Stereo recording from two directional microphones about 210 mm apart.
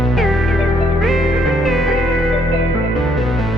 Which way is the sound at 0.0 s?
Centre (ahead or behind).